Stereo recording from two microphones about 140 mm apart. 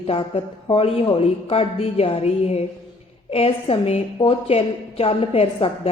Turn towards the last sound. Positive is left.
turn(degrees=45)  # may be behind; listen again after turning